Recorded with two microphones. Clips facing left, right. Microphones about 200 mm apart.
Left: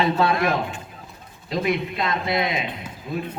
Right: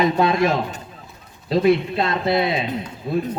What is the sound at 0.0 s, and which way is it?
Speech, 20° right (ahead or behind).